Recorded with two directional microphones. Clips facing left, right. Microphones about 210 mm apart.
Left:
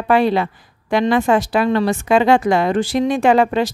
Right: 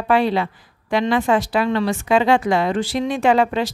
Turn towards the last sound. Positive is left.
turn(degrees=45)  # may be behind; listen again after turning